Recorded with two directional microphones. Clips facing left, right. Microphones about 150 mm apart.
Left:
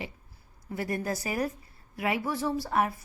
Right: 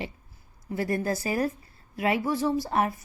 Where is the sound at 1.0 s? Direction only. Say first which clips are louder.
Right 4 dB; 30° right (ahead or behind).